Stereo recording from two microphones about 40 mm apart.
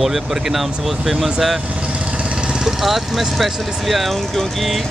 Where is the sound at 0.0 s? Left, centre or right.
Centre.